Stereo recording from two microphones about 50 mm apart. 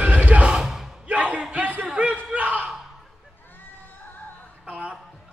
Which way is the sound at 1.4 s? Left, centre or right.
Right.